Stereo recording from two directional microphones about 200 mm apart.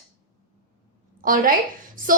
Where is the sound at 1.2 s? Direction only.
45° right (ahead or behind).